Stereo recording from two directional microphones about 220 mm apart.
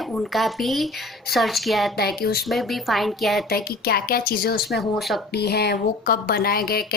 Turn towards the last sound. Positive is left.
turn(degrees=45)  # may be behind; listen again after turning